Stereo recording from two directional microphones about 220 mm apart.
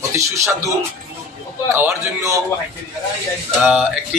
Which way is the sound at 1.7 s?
15° right (ahead or behind).